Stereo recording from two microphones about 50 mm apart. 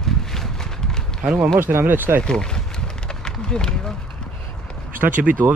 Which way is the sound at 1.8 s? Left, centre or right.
Right.